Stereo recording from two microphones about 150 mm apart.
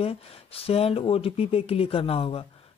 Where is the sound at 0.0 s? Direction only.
40° left (ahead or behind).